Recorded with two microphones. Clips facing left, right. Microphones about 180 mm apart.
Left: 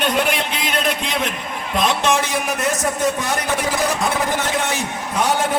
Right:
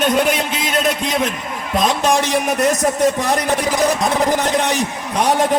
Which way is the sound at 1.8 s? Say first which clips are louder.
Right 2 dB; 35° right (ahead or behind).